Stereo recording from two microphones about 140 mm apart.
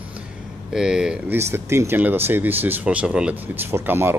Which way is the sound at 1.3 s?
20° right (ahead or behind).